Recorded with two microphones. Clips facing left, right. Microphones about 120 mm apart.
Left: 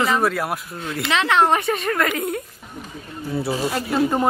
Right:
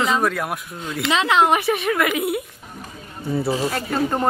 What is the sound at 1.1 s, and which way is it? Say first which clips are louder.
Speech: even; 15° right (ahead or behind).